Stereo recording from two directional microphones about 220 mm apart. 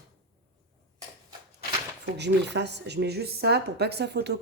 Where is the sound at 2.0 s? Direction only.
50° right (ahead or behind).